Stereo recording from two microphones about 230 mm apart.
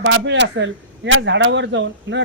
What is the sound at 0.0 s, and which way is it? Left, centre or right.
Speech, right.